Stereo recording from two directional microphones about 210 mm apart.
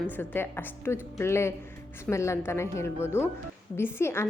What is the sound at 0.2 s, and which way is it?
A woman's voice, 10° left (ahead or behind).